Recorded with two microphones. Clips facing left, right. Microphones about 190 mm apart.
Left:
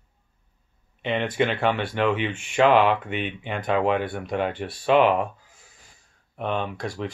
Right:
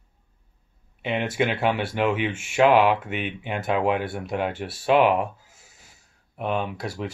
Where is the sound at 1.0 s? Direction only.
10° right (ahead or behind).